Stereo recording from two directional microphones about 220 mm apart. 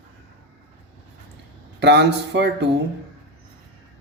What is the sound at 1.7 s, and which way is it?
Speech, 50° right (ahead or behind).